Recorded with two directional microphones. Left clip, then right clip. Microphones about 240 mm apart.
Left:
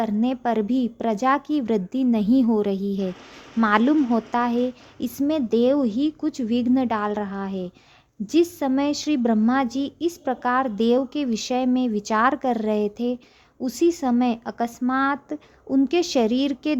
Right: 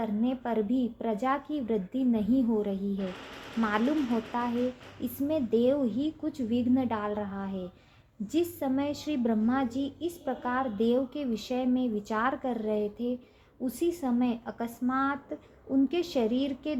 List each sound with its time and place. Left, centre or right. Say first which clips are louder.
0.0 s a woman's voice: left 8 dB; left